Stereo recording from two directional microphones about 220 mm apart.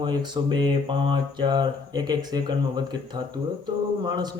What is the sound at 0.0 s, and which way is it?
A man's voice, 20° right (ahead or behind).